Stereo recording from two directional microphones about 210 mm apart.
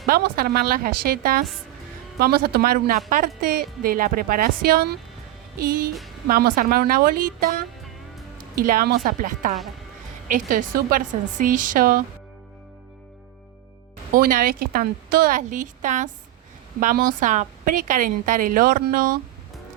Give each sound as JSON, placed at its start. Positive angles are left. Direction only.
{"t": 0.1, "sound": "a woman's voice", "side_deg": -45}
{"t": 14.1, "sound": "a woman's voice", "side_deg": -40}